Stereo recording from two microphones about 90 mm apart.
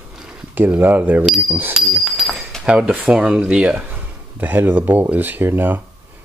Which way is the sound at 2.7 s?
15° right (ahead or behind).